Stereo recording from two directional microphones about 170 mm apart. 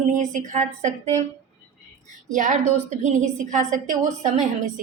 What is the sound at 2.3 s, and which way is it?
A woman's voice, 45° right (ahead or behind).